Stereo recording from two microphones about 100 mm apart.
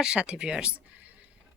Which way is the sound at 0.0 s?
10° right (ahead or behind).